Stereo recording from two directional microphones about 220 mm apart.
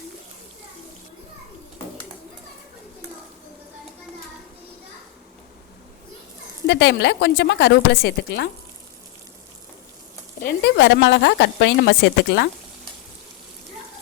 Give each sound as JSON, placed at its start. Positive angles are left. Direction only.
{"t": 6.7, "sound": "a woman's voice", "side_deg": 50}
{"t": 10.4, "sound": "a woman's voice", "side_deg": 50}